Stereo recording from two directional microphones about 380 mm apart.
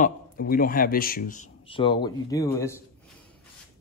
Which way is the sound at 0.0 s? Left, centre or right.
Left.